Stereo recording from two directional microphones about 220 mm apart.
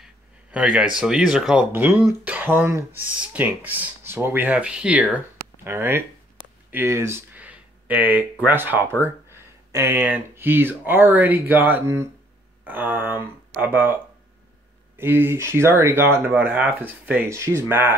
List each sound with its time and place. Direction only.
0.0 s speech: 5° right (ahead or behind)
6.4 s a sound: 20° right (ahead or behind)
6.7 s speech: 10° right (ahead or behind)
15.0 s speech: 10° right (ahead or behind)